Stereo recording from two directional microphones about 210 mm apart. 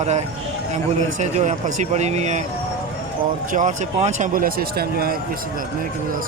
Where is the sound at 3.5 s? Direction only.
35° right (ahead or behind).